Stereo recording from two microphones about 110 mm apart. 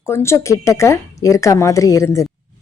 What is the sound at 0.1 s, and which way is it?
Speech, 25° left (ahead or behind).